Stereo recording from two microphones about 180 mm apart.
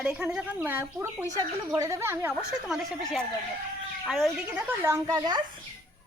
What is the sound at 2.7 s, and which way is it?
A woman's voice, centre (ahead or behind).